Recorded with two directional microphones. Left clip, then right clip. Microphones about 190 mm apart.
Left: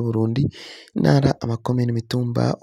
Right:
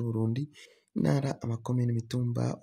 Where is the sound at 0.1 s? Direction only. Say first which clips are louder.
Left 11 dB; 45° left (ahead or behind).